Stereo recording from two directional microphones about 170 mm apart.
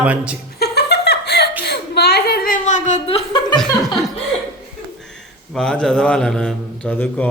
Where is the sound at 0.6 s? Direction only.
75° left (ahead or behind); by 3.2 s 45° left (ahead or behind).